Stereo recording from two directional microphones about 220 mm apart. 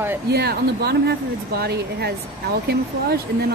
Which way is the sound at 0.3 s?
45° right (ahead or behind).